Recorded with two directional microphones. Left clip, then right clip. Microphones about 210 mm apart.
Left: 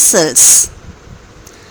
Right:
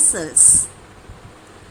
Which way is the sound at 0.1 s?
40° left (ahead or behind).